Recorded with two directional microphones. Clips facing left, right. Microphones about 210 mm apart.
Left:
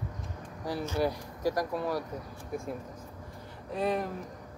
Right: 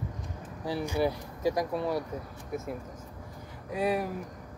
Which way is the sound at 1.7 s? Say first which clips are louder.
Right 2 dB; 20° right (ahead or behind).